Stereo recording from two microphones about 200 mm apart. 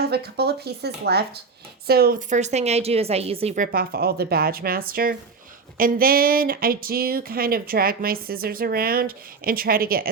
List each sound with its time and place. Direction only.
0.1 s speech: 55° right (ahead or behind)